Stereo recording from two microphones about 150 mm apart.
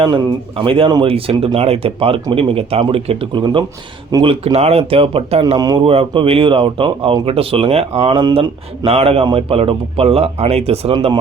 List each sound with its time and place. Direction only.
0.0 s speech: 30° right (ahead or behind)
5.5 s speech: 25° right (ahead or behind)
5.8 s speech: 40° right (ahead or behind)
10.9 s speech: 30° right (ahead or behind)